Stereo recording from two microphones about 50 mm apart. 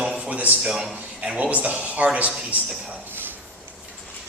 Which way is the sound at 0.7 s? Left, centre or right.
Centre.